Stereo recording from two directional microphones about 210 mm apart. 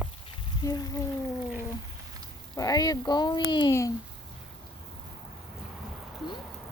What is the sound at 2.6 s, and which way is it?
Speech, 15° left (ahead or behind).